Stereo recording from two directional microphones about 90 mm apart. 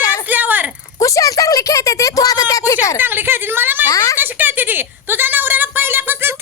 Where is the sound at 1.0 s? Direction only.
40° left (ahead or behind).